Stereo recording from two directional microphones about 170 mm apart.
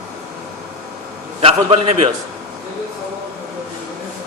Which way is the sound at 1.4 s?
35° right (ahead or behind).